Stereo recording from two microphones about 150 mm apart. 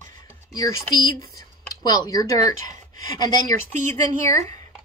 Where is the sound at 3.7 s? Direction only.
55° right (ahead or behind).